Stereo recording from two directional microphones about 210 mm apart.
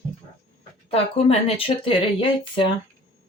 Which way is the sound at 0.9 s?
30° left (ahead or behind).